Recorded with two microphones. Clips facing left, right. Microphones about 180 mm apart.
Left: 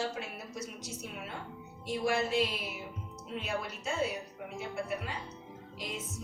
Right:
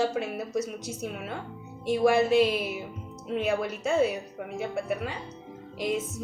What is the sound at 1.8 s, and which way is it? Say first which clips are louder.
Music: right 9 dB; 65° right (ahead or behind).